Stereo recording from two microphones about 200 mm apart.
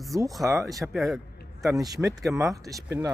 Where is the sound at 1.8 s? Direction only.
15° right (ahead or behind).